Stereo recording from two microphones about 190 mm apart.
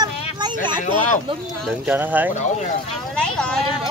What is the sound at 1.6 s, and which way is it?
Speech, 5° right (ahead or behind).